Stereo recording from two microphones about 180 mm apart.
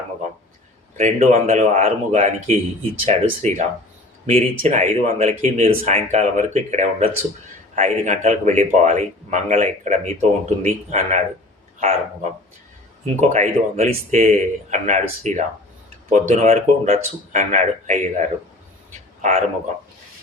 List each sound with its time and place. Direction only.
0.9 s speech: 40° right (ahead or behind)
13.1 s speech: 40° right (ahead or behind)